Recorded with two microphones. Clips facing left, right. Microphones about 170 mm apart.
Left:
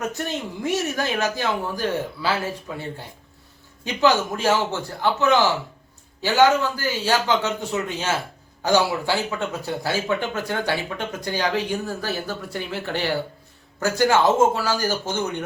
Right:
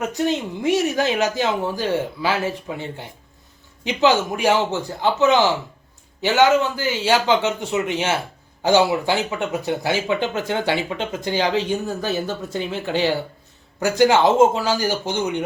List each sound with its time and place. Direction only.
0.0 s speech: 15° right (ahead or behind)
3.8 s speech: 20° right (ahead or behind)